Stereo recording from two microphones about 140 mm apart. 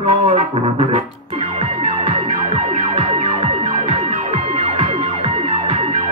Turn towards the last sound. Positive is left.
turn(degrees=-45)  # may be behind; listen again after turning